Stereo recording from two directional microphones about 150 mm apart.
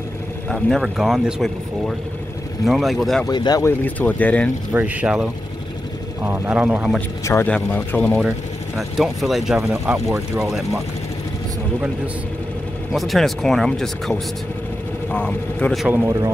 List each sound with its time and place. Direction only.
0.5 s speech: centre (ahead or behind)
3.3 s speech: 25° left (ahead or behind)
3.6 s speech: 10° left (ahead or behind)
4.7 s a man's voice: 10° right (ahead or behind)
7.2 s speech: 20° left (ahead or behind)
8.7 s speech: centre (ahead or behind)
9.6 s a man's voice: 15° right (ahead or behind)
12.9 s speech: centre (ahead or behind)
15.1 s speech: 5° left (ahead or behind)
15.9 s a man's voice: 20° right (ahead or behind)